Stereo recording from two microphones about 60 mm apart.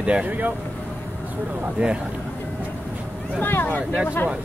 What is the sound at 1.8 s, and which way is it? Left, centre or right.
Speech, right.